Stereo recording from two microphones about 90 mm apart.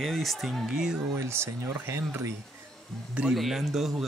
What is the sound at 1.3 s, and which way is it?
Speech, 25° right (ahead or behind).